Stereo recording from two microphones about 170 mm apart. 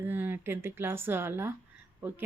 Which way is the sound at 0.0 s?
10° right (ahead or behind).